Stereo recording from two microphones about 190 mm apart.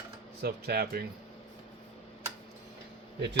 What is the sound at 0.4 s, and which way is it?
Speech, 55° right (ahead or behind).